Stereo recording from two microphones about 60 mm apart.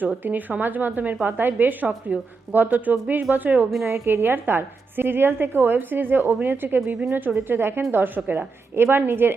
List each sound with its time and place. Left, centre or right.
0.0 s a woman's voice: right
3.8 s a woman's voice: right